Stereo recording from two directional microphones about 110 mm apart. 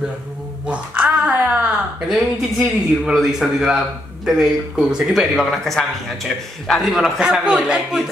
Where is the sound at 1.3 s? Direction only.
20° right (ahead or behind).